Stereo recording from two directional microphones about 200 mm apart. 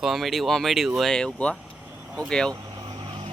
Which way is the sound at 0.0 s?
Centre (ahead or behind).